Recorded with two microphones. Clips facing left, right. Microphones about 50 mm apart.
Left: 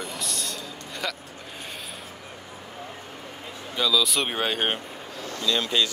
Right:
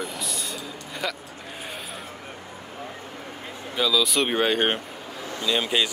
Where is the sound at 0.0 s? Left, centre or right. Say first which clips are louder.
Right 1 dB; centre.